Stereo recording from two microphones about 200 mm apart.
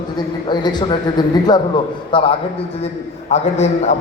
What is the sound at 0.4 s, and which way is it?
A man's voice, 20° left (ahead or behind).